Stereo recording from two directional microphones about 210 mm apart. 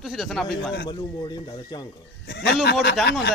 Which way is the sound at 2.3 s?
50° left (ahead or behind).